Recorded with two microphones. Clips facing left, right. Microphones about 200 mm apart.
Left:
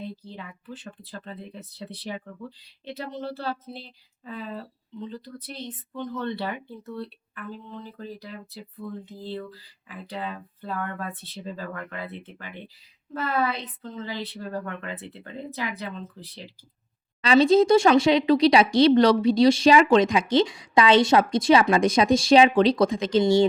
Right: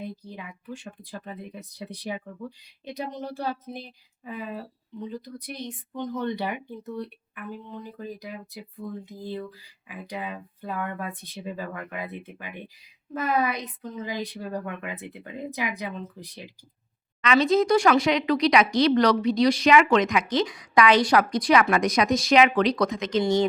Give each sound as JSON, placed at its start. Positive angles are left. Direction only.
{"t": 0.0, "sound": "a woman's voice", "side_deg": -15}
{"t": 17.2, "sound": "speech", "side_deg": 30}